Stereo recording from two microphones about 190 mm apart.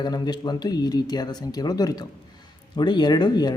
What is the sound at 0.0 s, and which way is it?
A man's voice, 20° left (ahead or behind).